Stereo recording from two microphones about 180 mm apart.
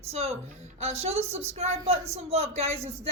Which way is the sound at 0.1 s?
35° right (ahead or behind).